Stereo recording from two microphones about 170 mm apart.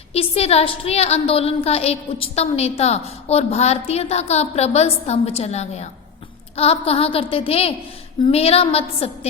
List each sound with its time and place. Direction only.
0.1 s a woman's voice: 35° left (ahead or behind)